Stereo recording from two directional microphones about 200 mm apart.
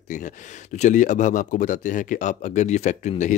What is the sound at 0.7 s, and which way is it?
Speech, 40° left (ahead or behind).